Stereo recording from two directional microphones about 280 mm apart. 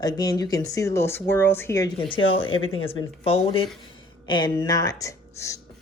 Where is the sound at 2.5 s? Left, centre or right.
Left.